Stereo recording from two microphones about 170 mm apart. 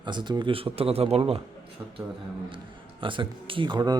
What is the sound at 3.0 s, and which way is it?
Speech, 30° right (ahead or behind).